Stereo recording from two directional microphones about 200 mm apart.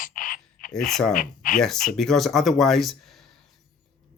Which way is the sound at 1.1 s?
45° left (ahead or behind).